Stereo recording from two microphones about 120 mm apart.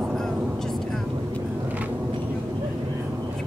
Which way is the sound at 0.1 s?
5° left (ahead or behind).